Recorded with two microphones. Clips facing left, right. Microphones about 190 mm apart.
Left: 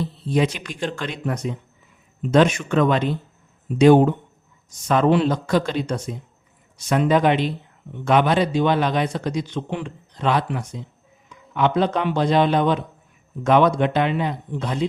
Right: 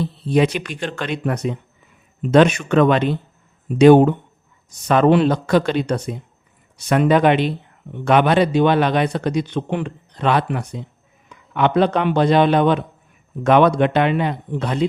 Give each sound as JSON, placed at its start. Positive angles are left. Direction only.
{"t": 0.0, "sound": "speech", "side_deg": -65}